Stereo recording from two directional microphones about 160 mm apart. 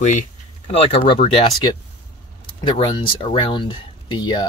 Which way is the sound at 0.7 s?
35° left (ahead or behind).